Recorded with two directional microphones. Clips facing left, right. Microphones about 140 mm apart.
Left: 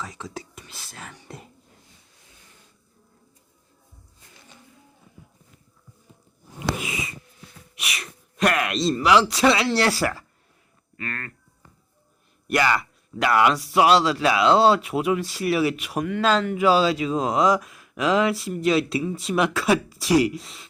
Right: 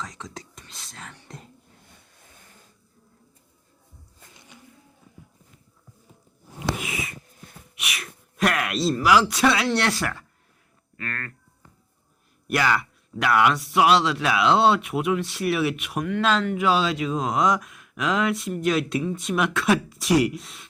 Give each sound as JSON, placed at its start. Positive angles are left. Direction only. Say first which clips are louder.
{"t": 0.0, "sound": "whispering", "louder": "left 2 dB", "side_deg": 5}
{"t": 1.9, "sound": "vehicle", "louder": "right 3 dB", "side_deg": -55}
{"t": 7.8, "sound": "speech", "louder": "left 1 dB", "side_deg": 0}
{"t": 12.5, "sound": "speech", "louder": "left 1 dB", "side_deg": 0}